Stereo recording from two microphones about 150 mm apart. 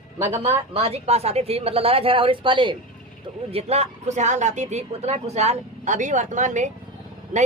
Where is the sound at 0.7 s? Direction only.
40° right (ahead or behind).